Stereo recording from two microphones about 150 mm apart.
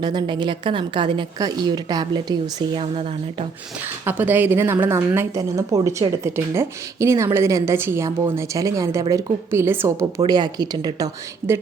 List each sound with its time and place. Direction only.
0.0 s a woman's voice: 30° right (ahead or behind)
2.7 s a woman's voice: 40° right (ahead or behind)
4.0 s a woman's voice: 10° right (ahead or behind)
10.2 s a woman's voice: 30° right (ahead or behind)
11.4 s a woman's voice: 40° right (ahead or behind)